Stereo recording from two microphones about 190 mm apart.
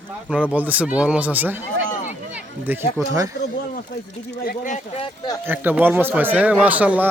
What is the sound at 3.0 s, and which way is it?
Speech, 20° right (ahead or behind).